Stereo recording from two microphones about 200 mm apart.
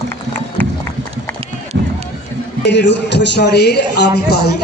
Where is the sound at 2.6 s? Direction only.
60° left (ahead or behind).